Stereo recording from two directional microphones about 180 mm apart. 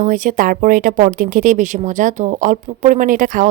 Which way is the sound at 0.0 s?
45° right (ahead or behind).